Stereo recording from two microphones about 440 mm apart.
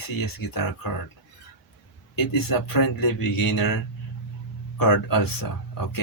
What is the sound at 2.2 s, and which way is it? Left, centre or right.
Speech, left.